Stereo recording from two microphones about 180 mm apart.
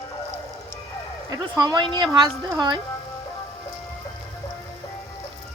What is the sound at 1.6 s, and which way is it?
A woman's voice, 25° right (ahead or behind).